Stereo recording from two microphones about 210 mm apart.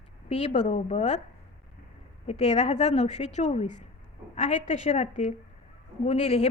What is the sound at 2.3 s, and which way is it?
A woman's voice, 30° left (ahead or behind).